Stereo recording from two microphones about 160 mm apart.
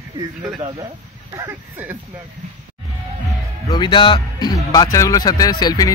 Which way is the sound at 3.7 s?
30° left (ahead or behind).